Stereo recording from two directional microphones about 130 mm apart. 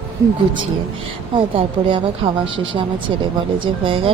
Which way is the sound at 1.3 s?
40° right (ahead or behind).